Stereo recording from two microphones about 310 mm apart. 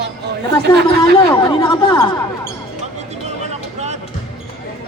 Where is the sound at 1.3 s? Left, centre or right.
Centre.